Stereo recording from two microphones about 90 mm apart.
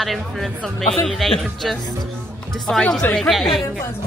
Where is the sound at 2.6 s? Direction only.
5° left (ahead or behind).